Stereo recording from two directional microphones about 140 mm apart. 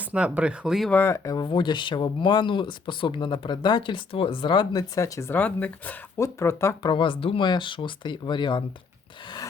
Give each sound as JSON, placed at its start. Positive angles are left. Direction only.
{"t": 0.0, "sound": "speech", "side_deg": -10}
{"t": 0.9, "sound": "speech", "side_deg": 15}
{"t": 6.9, "sound": "speech", "side_deg": 35}